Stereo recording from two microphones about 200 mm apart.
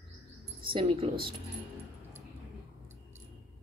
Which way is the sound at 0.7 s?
25° right (ahead or behind).